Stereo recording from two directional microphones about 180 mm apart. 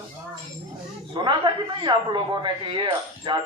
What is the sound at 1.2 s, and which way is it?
Speech, 25° right (ahead or behind).